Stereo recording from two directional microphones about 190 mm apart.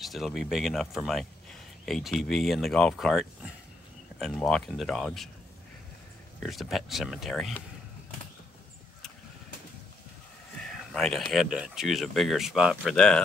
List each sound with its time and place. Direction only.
0.0 s speech: centre (ahead or behind)
6.4 s speech: centre (ahead or behind)
10.7 s speech: 5° left (ahead or behind)